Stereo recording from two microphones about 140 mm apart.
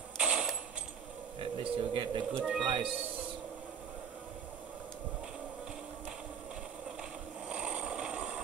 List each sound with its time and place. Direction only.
0.2 s mechanisms: 5° right (ahead or behind)
1.4 s speech: 40° right (ahead or behind)
7.0 s vehicle: 5° right (ahead or behind)